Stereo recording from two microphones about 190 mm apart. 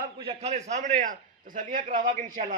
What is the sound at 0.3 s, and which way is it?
A man's voice, 35° right (ahead or behind).